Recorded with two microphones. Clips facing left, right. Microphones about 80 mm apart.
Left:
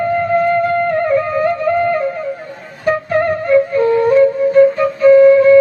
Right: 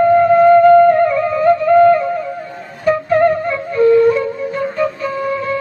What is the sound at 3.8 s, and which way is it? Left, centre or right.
Flute, left.